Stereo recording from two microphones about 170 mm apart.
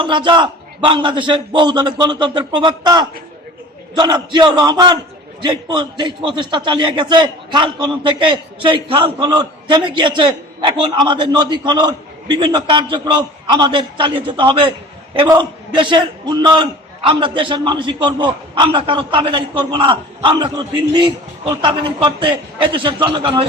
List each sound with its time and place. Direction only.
0.0 s a man's voice: 30° right (ahead or behind)